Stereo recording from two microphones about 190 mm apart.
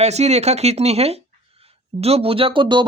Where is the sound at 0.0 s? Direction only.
35° right (ahead or behind).